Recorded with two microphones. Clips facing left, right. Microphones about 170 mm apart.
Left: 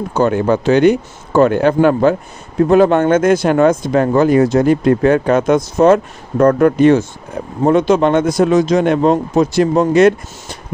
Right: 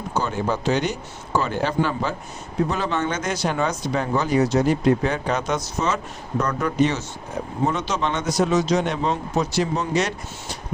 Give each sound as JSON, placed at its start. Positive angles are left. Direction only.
{"t": 0.1, "sound": "speech", "side_deg": 60}